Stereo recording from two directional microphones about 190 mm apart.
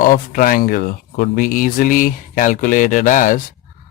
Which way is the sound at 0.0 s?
45° left (ahead or behind).